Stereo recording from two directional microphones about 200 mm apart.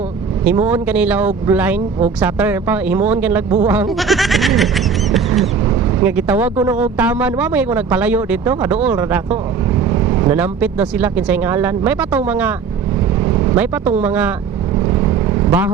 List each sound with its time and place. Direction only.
0.4 s speech: 5° right (ahead or behind)
3.7 s a sound: 5° right (ahead or behind)
6.0 s speech: 10° right (ahead or behind)
13.1 s vehicle: 15° right (ahead or behind)
14.0 s speech: 5° right (ahead or behind)
14.8 s vehicle: 15° right (ahead or behind)